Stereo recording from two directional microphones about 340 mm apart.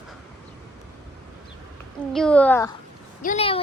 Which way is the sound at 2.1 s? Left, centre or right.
Centre.